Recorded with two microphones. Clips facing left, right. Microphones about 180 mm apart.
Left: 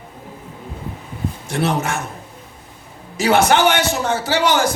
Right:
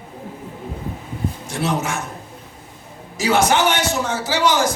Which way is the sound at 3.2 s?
60° left (ahead or behind).